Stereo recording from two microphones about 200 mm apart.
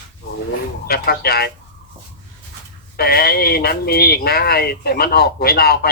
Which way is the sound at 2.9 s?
50° left (ahead or behind).